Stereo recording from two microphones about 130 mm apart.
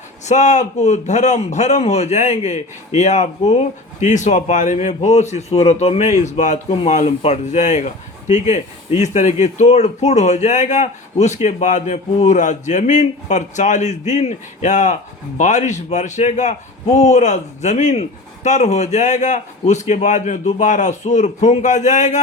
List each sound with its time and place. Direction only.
0.3 s a man's voice: 65° left (ahead or behind)